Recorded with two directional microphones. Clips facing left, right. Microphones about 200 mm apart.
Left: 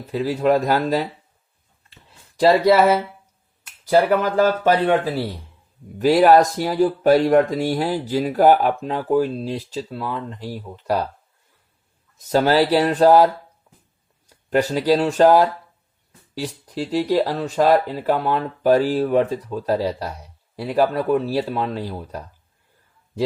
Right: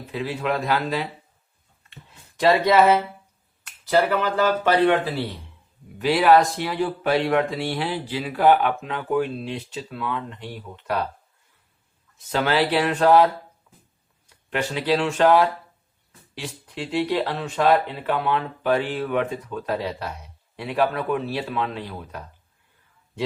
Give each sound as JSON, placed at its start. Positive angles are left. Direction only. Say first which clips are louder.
{"t": 0.1, "sound": "speech", "louder": "left 7 dB", "side_deg": 40}
{"t": 2.3, "sound": "speech", "louder": "left 3 dB", "side_deg": 35}
{"t": 4.2, "sound": "speech", "louder": "left 4 dB", "side_deg": 45}
{"t": 6.0, "sound": "speech", "louder": "left 4 dB", "side_deg": 40}
{"t": 12.3, "sound": "speech", "louder": "left 5 dB", "side_deg": 40}